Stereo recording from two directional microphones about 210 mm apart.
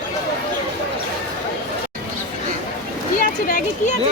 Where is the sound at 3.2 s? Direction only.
40° left (ahead or behind).